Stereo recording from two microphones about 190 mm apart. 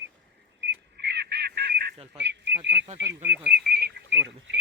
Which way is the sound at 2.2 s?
65° right (ahead or behind).